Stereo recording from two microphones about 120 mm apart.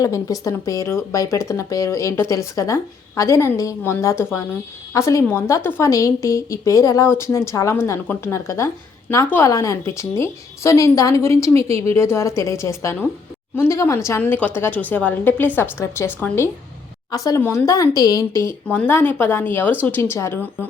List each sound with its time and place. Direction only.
0.0 s a woman's voice: 30° left (ahead or behind)
17.1 s a woman's voice: 30° left (ahead or behind)